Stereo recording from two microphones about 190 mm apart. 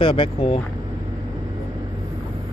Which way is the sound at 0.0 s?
30° left (ahead or behind).